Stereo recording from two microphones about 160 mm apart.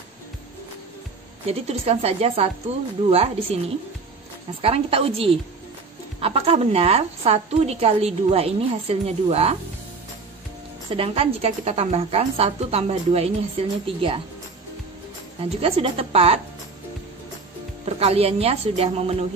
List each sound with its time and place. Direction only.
1.5 s a woman's voice: 40° right (ahead or behind)
4.6 s a woman's voice: 35° right (ahead or behind)
10.9 s a woman's voice: 35° right (ahead or behind)
15.6 s a woman's voice: 40° right (ahead or behind)
17.8 s a woman's voice: 40° right (ahead or behind)